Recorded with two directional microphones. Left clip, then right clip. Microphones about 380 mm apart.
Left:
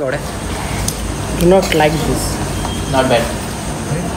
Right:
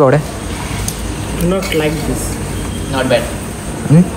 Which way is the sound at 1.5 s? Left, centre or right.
Left.